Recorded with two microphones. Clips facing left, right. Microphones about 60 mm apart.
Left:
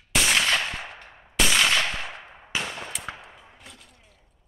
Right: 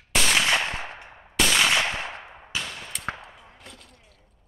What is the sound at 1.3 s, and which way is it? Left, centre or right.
Gunshot, centre.